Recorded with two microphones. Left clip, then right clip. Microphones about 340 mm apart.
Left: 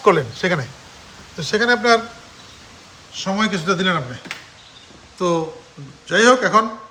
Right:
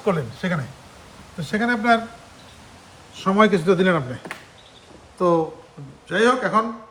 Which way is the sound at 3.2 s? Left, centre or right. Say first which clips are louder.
Right 3 dB; centre.